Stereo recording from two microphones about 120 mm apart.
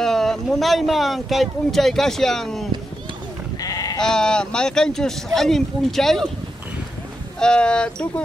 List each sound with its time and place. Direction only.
0.0 s speech: 5° left (ahead or behind)
3.5 s sheep: 30° left (ahead or behind)
4.0 s speech: 5° left (ahead or behind)
7.3 s speech: 5° left (ahead or behind)